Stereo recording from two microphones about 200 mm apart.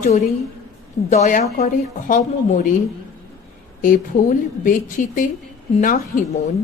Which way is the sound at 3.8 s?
40° left (ahead or behind).